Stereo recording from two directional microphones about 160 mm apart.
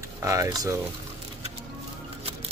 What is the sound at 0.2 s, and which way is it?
Speech, 20° right (ahead or behind).